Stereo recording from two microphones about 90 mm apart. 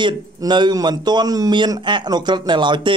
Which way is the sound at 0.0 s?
55° right (ahead or behind).